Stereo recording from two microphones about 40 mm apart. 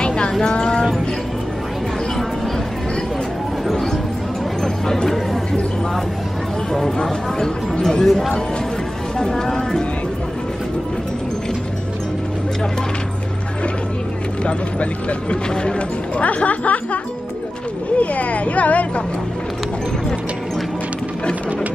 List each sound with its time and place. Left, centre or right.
0.0 s a sound: left
4.8 s chatter: centre
6.7 s speech: centre
8.0 s speech: centre
9.4 s a sound: centre
14.4 s speech: left